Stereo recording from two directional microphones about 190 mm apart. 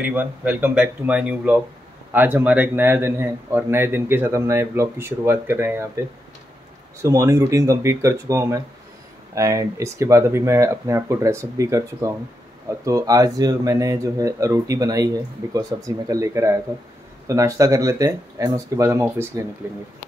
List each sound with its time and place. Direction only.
0.0 s a man's voice: 10° right (ahead or behind)
7.0 s a man's voice: 15° right (ahead or behind)